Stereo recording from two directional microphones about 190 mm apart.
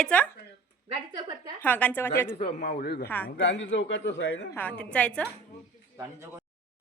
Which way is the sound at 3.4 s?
70° left (ahead or behind).